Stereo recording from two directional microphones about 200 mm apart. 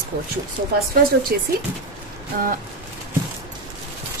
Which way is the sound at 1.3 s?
50° right (ahead or behind).